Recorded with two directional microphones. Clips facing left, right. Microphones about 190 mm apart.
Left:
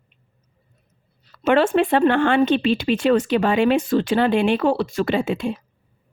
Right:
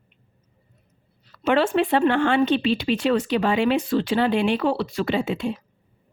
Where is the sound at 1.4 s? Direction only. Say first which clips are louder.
Left 3 dB; 50° left (ahead or behind).